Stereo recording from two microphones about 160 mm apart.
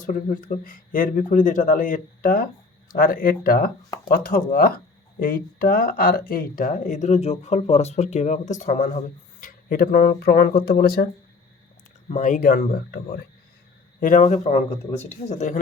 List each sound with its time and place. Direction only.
0.0 s speech: 55° left (ahead or behind); by 11.1 s 70° left (ahead or behind)
12.0 s speech: 50° left (ahead or behind); by 13.1 s 75° left (ahead or behind)
14.0 s speech: 55° left (ahead or behind)